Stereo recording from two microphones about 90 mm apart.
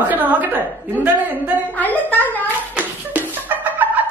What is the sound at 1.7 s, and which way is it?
Speech, 20° left (ahead or behind).